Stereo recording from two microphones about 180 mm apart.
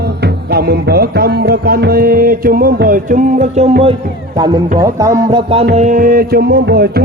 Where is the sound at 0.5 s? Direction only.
60° right (ahead or behind); by 3.7 s 45° right (ahead or behind).